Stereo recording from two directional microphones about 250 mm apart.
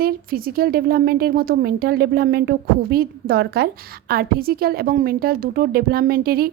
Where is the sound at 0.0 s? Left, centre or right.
Right.